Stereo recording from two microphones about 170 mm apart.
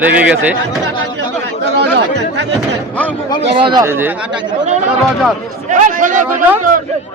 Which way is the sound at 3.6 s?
25° right (ahead or behind).